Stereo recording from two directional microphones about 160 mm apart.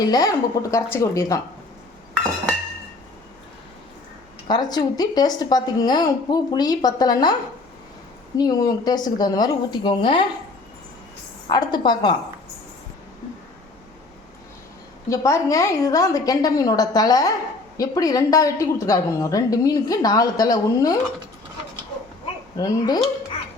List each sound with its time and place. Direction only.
0.0 s speech: 25° left (ahead or behind)
4.4 s speech: 25° left (ahead or behind)
8.4 s speech: 25° left (ahead or behind)
11.4 s speech: 25° left (ahead or behind)
15.1 s speech: 20° left (ahead or behind)
22.5 s speech: 20° left (ahead or behind)